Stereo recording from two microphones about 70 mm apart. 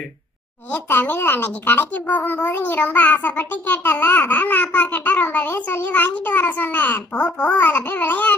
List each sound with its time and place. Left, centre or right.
0.7 s a child's voice: left